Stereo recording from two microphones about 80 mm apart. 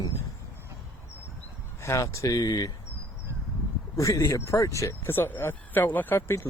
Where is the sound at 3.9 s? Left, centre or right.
Left.